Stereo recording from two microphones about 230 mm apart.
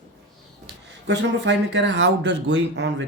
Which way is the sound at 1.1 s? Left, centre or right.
Right.